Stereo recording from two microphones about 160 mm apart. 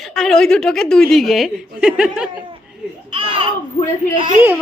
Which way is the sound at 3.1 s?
30° right (ahead or behind).